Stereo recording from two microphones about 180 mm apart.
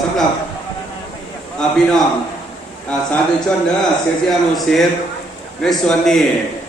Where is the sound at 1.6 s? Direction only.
5° left (ahead or behind).